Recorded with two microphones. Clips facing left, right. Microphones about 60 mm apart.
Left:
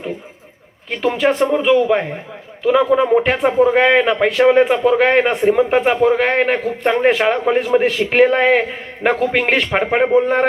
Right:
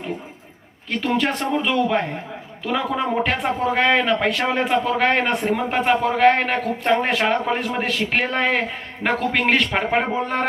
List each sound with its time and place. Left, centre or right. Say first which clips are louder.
0.9 s a man's voice: left 5 dB; centre